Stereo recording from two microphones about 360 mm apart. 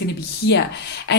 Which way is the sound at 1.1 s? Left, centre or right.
Left.